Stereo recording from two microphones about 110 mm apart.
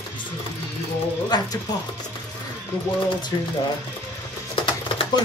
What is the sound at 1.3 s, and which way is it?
Speech, 40° left (ahead or behind).